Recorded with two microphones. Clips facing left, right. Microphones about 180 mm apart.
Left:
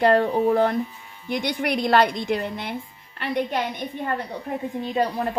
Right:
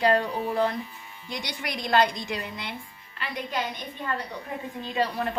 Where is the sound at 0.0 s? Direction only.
55° left (ahead or behind).